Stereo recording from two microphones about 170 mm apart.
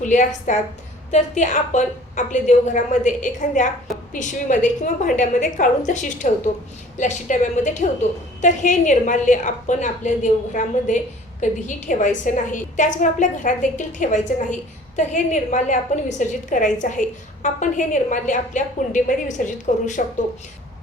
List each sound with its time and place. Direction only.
0.0 s a woman's voice: 45° left (ahead or behind)